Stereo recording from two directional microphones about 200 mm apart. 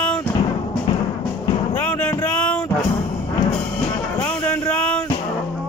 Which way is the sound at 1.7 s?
10° left (ahead or behind).